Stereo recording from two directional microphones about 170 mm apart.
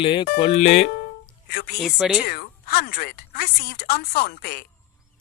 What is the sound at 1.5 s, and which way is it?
Speech, 65° left (ahead or behind).